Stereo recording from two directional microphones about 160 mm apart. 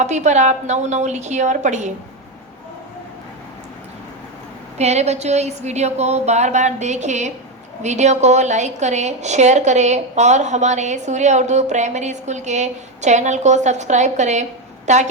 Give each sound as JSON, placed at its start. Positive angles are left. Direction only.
{"t": 0.0, "sound": "a woman's voice", "side_deg": -45}
{"t": 4.8, "sound": "a woman's voice", "side_deg": -45}